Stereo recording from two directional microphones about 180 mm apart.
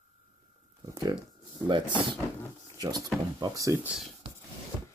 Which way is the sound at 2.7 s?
20° right (ahead or behind).